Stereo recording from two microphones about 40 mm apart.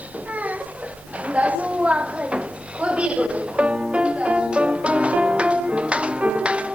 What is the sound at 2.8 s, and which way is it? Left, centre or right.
Music, right.